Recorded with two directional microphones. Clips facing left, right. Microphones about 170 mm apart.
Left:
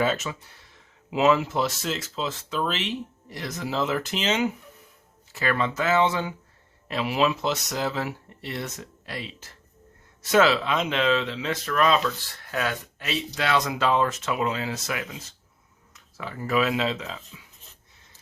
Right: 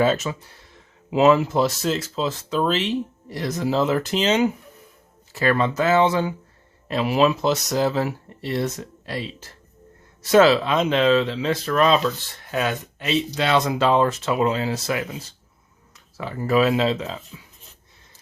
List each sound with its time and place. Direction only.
0.0 s speech: 35° right (ahead or behind)